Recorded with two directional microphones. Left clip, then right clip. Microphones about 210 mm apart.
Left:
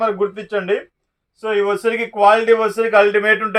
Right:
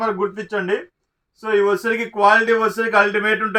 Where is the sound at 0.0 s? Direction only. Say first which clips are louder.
Left 3 dB; 25° left (ahead or behind).